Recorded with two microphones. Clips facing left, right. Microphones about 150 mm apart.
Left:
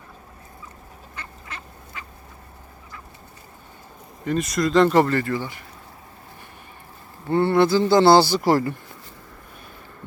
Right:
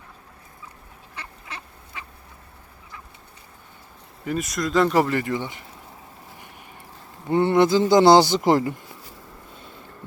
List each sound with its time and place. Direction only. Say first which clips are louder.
4.3 s speech: left 3 dB; centre (ahead or behind); by 5.6 s 20° right (ahead or behind)
7.3 s speech: even; 20° right (ahead or behind)